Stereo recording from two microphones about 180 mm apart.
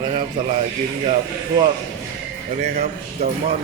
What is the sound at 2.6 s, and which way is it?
Speech, 55° right (ahead or behind).